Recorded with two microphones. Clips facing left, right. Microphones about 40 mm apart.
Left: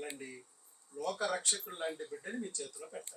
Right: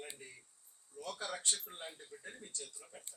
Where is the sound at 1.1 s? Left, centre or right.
Left.